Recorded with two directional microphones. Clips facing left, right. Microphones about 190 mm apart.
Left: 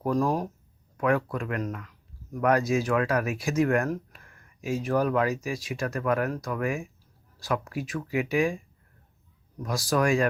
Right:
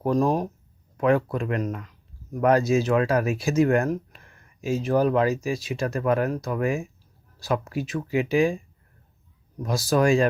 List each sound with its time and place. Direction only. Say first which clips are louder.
0.0 s speech: right 3 dB; 20° right (ahead or behind)
9.6 s speech: right 4 dB; 25° right (ahead or behind)